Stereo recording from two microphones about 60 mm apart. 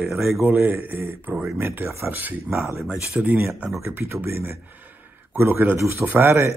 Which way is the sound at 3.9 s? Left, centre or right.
Right.